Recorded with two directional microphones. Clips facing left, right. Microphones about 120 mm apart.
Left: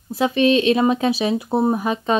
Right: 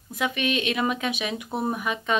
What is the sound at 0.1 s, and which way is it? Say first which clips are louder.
A woman's voice: left 10 dB; 30° left (ahead or behind).